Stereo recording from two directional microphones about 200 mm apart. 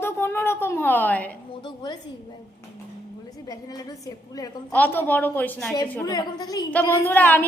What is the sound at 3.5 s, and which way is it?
A woman's voice, 20° left (ahead or behind).